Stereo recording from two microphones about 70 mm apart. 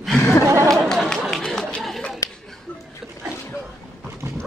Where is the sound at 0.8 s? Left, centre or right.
Centre.